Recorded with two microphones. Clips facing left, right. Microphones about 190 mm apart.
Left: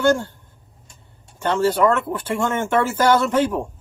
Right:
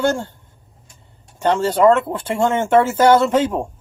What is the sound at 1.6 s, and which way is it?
Speech, 25° right (ahead or behind).